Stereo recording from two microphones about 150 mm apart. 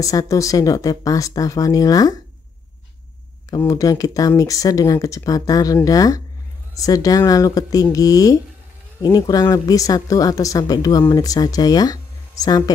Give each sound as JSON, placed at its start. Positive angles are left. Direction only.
{"t": 0.0, "sound": "speech", "side_deg": 25}
{"t": 3.4, "sound": "speech", "side_deg": 20}